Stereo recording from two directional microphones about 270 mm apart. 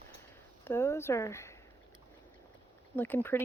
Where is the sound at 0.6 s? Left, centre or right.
Centre.